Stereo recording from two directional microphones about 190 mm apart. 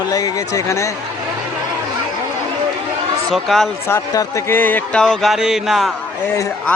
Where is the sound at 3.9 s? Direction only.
15° left (ahead or behind).